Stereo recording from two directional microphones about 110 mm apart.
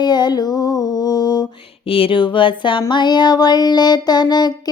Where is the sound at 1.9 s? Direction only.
55° left (ahead or behind).